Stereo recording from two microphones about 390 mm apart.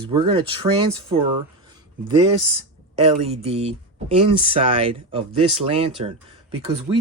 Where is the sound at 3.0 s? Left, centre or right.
Centre.